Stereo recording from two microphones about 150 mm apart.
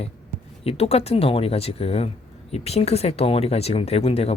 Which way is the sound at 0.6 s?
40° left (ahead or behind).